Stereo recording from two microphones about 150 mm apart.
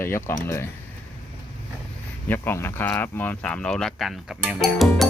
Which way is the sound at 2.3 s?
15° left (ahead or behind).